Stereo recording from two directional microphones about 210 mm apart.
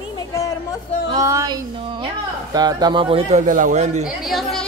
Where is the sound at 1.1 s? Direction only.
15° right (ahead or behind).